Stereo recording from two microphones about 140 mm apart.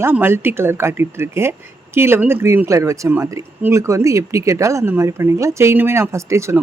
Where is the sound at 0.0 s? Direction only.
15° right (ahead or behind).